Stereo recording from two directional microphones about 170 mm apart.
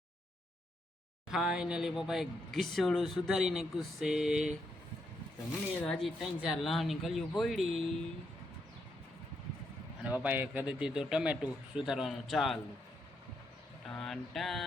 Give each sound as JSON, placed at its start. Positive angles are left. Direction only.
{"t": 1.3, "sound": "speech", "side_deg": -5}
{"t": 5.8, "sound": "speech", "side_deg": 5}
{"t": 10.0, "sound": "speech", "side_deg": -10}
{"t": 13.8, "sound": "speech", "side_deg": 5}